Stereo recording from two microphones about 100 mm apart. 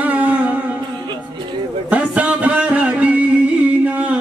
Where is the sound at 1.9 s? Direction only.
15° right (ahead or behind).